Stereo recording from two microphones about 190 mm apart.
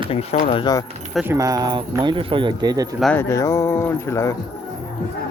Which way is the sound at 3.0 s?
10° left (ahead or behind).